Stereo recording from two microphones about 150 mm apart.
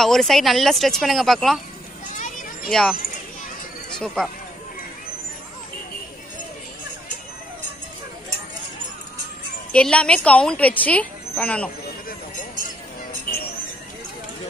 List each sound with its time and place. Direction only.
0.0 s speech: centre (ahead or behind)
2.0 s children playing: 60° left (ahead or behind)
2.7 s speech: 5° left (ahead or behind)
4.0 s speech: centre (ahead or behind)
9.7 s speech: 10° left (ahead or behind)